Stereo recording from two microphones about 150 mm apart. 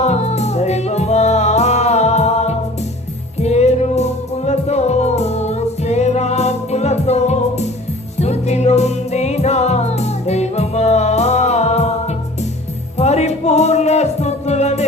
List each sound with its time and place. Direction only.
0.0 s music: 45° left (ahead or behind)
13.0 s music: 45° left (ahead or behind)